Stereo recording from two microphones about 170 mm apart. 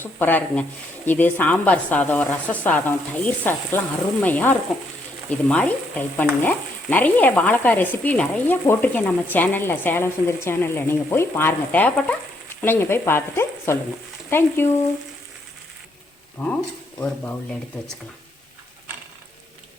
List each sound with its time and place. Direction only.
0.0 s frying: 10° left (ahead or behind)
16.4 s frying: 5° left (ahead or behind)